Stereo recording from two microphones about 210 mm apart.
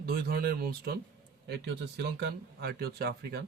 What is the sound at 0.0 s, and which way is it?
Speech, 45° right (ahead or behind).